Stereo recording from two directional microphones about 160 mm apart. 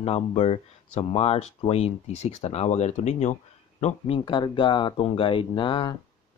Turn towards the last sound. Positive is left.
turn(degrees=30)  # may be behind; listen again after turning